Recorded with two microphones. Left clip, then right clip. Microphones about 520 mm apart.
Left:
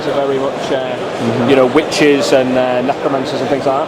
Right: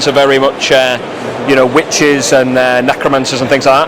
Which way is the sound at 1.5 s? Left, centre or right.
Right.